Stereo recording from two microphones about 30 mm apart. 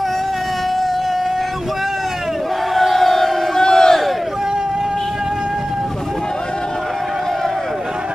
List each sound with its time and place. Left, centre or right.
2.7 s crowd: centre